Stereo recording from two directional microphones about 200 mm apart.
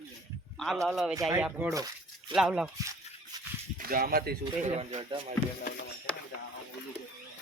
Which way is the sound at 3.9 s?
45° right (ahead or behind).